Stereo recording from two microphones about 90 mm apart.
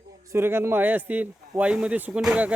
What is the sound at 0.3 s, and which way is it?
A man's voice, 25° right (ahead or behind).